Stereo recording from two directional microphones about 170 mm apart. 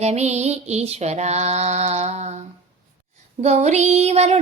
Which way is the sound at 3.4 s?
40° right (ahead or behind).